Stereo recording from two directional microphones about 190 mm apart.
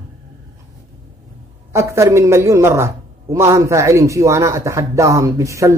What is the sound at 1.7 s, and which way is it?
A woman's voice, 15° right (ahead or behind).